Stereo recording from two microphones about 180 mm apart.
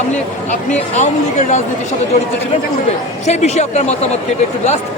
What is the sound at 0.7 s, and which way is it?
Speech, 40° left (ahead or behind).